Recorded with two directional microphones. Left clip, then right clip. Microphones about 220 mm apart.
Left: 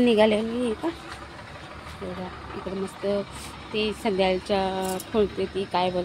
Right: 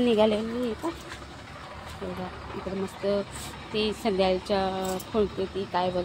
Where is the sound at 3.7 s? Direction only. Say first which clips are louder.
Left 1 dB; 5° left (ahead or behind).